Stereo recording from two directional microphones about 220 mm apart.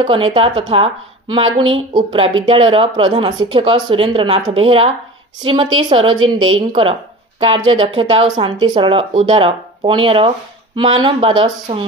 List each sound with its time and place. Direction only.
0.0 s speech: 25° right (ahead or behind)